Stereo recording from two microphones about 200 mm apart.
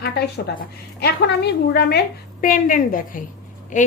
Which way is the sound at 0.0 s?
55° left (ahead or behind).